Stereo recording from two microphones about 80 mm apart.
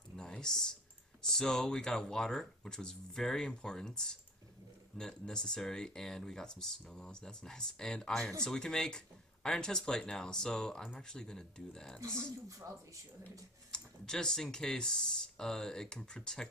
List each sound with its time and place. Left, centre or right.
0.1 s a sound: centre
1.2 s speech: centre
12.0 s speech: right
13.2 s speech: centre